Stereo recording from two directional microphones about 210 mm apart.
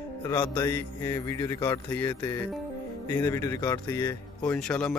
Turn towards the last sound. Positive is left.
turn(degrees=5)  # may be behind; listen again after turning